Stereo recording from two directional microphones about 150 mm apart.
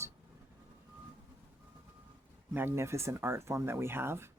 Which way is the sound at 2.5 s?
15° right (ahead or behind).